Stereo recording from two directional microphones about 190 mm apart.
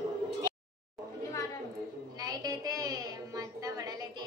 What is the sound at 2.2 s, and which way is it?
Child singing, 20° right (ahead or behind).